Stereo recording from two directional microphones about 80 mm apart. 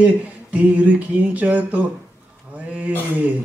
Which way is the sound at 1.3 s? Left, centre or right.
Centre.